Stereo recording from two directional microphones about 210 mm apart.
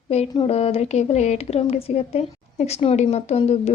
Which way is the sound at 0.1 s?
30° left (ahead or behind).